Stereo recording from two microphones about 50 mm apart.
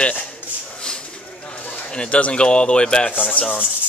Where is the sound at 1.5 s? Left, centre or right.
Left.